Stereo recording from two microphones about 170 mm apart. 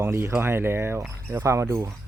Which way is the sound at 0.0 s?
15° right (ahead or behind).